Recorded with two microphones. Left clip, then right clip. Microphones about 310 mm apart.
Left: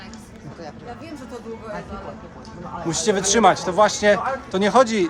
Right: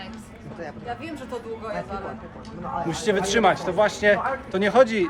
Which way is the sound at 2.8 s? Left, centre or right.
Centre.